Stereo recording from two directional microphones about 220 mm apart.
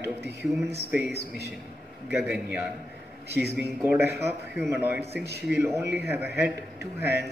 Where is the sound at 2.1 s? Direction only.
5° right (ahead or behind).